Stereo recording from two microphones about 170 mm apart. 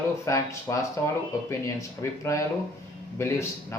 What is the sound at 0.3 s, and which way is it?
Speech, 15° left (ahead or behind).